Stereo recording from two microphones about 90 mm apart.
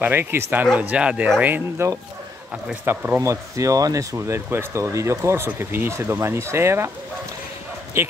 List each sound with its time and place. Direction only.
0.0 s speech: 25° right (ahead or behind)
0.7 s speech: 15° right (ahead or behind)
3.2 s speech: 35° right (ahead or behind)
8.0 s speech: 30° right (ahead or behind)